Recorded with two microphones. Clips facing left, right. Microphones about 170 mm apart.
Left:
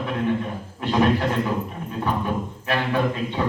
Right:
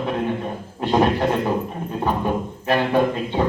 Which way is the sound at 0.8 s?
35° right (ahead or behind).